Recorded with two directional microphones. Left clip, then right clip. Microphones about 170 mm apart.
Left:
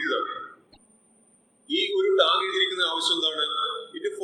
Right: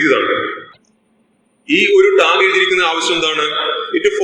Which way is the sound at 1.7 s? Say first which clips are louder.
Right 13 dB; 25° right (ahead or behind).